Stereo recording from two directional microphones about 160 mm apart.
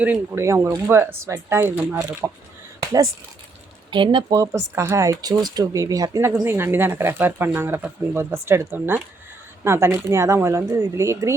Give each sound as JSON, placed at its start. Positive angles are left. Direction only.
{"t": 0.0, "sound": "speech", "side_deg": -15}
{"t": 3.9, "sound": "speech", "side_deg": -30}